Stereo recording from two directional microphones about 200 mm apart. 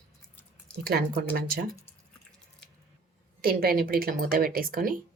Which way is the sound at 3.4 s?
50° right (ahead or behind).